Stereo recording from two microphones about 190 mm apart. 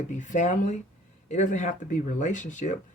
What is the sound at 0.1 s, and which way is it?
Speech, 40° left (ahead or behind).